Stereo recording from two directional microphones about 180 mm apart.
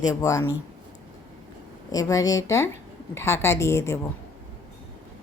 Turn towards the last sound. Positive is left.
turn(degrees=15)  # may be behind; listen again after turning